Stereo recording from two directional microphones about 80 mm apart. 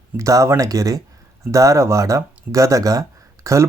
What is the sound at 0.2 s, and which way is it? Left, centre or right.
Speech, right.